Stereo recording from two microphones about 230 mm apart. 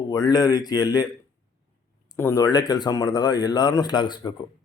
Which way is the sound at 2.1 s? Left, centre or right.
Centre.